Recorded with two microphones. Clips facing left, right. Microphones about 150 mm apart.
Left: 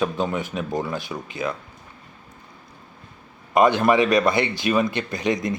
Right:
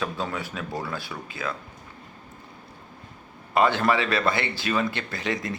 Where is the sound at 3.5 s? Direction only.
15° left (ahead or behind).